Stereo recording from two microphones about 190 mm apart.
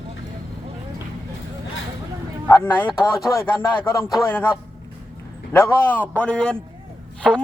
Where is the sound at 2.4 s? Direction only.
15° left (ahead or behind).